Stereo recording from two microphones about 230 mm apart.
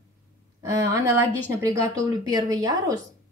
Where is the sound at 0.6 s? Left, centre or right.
Centre.